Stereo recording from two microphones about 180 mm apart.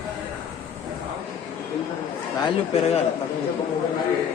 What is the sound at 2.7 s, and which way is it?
Speech, 35° left (ahead or behind).